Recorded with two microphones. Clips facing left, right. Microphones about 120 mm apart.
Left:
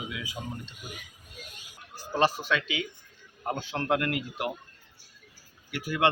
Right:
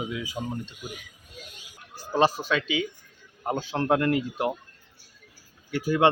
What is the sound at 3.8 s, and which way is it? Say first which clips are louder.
Speech: right 5 dB; 25° right (ahead or behind).